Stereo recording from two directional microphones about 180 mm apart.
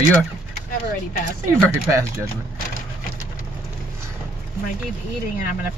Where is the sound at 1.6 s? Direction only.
15° right (ahead or behind).